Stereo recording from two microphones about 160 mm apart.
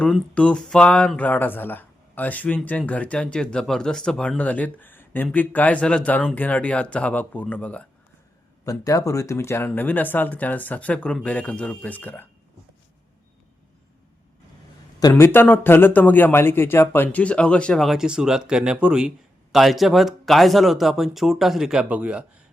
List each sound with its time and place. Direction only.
0.0 s speech: 5° left (ahead or behind)
8.6 s speech: 20° left (ahead or behind)
15.1 s speech: 15° left (ahead or behind); by 22.2 s 10° right (ahead or behind)